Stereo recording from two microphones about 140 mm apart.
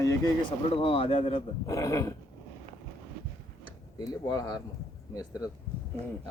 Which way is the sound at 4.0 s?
30° left (ahead or behind).